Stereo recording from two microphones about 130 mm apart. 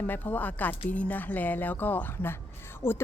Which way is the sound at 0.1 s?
15° left (ahead or behind).